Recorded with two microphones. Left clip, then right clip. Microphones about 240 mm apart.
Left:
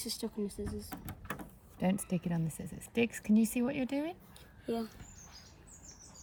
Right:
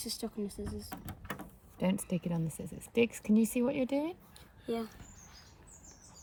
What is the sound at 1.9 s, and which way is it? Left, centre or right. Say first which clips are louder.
Speech: right 1 dB; centre.